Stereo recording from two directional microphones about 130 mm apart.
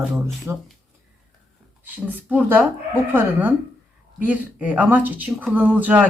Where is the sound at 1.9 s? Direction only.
10° right (ahead or behind).